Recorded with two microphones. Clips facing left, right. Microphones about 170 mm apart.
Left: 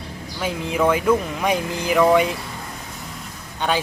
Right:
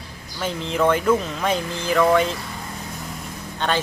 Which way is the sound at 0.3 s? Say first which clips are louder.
Left 1 dB; 10° left (ahead or behind).